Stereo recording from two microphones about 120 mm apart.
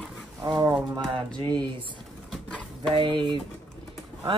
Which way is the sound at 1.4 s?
40° right (ahead or behind).